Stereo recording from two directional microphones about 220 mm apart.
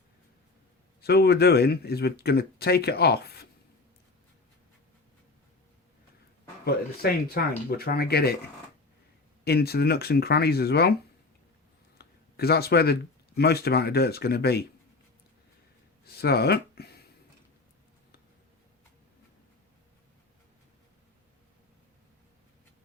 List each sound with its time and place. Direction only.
1.0 s speech: 45° left (ahead or behind)
6.7 s speech: 45° left (ahead or behind)
9.4 s speech: 45° left (ahead or behind)
11.9 s speech: 45° left (ahead or behind)
16.0 s speech: 45° left (ahead or behind)